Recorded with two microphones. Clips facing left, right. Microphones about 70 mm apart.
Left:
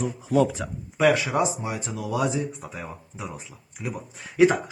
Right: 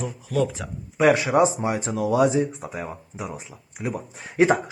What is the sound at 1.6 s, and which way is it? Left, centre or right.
Speech, right.